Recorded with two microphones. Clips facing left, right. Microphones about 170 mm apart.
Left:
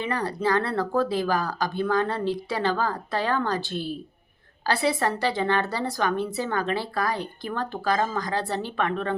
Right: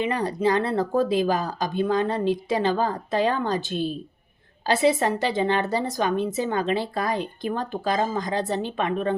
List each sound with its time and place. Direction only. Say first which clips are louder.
0.0 s speech: right 3 dB; 20° right (ahead or behind)